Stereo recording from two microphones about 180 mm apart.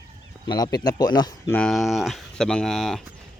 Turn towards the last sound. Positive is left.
turn(degrees=0)  # may be behind; listen again after turning